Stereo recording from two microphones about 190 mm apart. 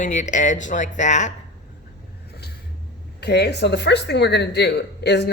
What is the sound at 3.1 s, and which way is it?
Speech, 60° left (ahead or behind).